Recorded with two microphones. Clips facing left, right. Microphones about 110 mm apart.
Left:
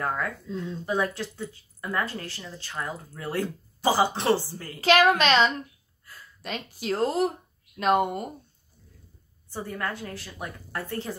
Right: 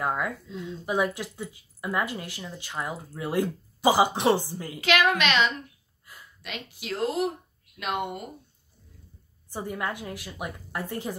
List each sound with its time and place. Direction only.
0.0 s speech: 15° right (ahead or behind)
4.7 s a woman's voice: 35° left (ahead or behind)
6.0 s a sound: 15° right (ahead or behind)
6.4 s speech: 40° left (ahead or behind)
9.5 s speech: 15° right (ahead or behind)